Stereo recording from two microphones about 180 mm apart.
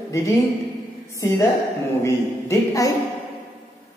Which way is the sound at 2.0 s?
15° left (ahead or behind).